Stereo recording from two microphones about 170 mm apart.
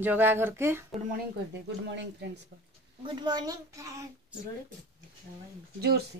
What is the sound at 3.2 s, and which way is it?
Speech, 25° right (ahead or behind).